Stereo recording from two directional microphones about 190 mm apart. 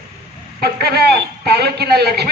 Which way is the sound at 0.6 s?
55° right (ahead or behind).